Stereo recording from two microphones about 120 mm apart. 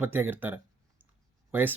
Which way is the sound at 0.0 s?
15° right (ahead or behind).